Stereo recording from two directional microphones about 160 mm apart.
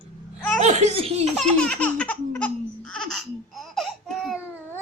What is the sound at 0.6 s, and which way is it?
Speech, 45° right (ahead or behind).